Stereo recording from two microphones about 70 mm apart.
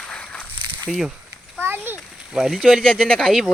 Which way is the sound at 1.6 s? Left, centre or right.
Right.